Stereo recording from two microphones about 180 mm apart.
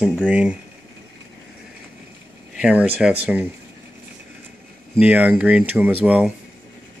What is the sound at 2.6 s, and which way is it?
Speech, 10° right (ahead or behind).